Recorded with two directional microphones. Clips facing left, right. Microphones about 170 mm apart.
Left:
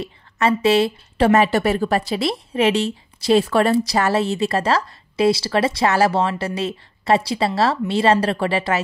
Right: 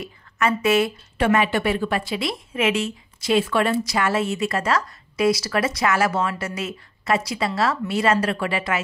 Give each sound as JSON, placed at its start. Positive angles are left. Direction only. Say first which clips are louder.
{"t": 0.0, "sound": "a woman's voice", "louder": "left 3 dB", "side_deg": 30}